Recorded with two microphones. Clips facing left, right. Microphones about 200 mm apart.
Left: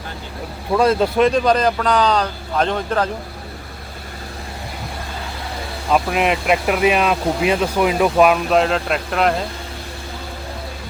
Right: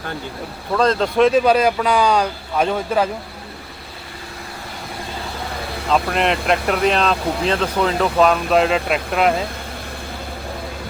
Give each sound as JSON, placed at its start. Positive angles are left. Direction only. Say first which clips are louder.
{"t": 0.7, "sound": "speech", "louder": "left 2 dB", "side_deg": 10}
{"t": 5.9, "sound": "speech", "louder": "left 1 dB", "side_deg": 5}